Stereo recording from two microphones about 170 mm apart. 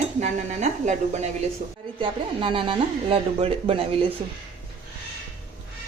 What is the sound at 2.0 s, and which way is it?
Speech, 30° right (ahead or behind).